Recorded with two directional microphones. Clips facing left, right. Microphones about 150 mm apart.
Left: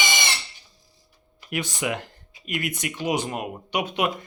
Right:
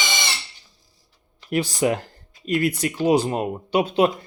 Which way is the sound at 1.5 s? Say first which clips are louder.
Right 7 dB; 35° right (ahead or behind).